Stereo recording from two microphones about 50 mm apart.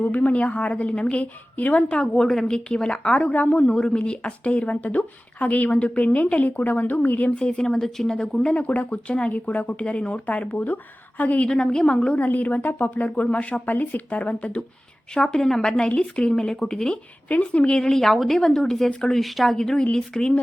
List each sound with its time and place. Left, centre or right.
0.0 s speech: left
2.1 s a woman's voice: centre
3.3 s a woman's voice: left
3.7 s speech: centre; by 7.3 s left
7.3 s a woman's voice: centre
8.6 s a woman's voice: left
11.4 s a woman's voice: centre
12.2 s a woman's voice: left
15.1 s a woman's voice: centre
17.2 s a woman's voice: left